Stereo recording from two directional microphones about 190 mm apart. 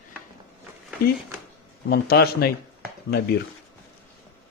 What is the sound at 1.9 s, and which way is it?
Speech, 55° left (ahead or behind).